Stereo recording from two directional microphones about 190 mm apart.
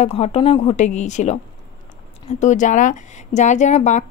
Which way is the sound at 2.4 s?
40° left (ahead or behind).